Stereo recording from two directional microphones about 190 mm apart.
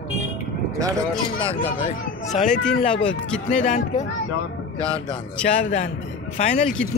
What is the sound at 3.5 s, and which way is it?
Speech, 40° left (ahead or behind).